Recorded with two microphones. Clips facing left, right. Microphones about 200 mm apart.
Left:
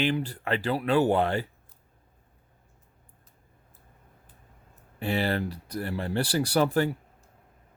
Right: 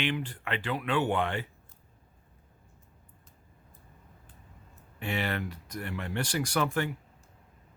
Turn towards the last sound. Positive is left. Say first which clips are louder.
# left 6 dB
turn(degrees=35)  # may be behind; listen again after turning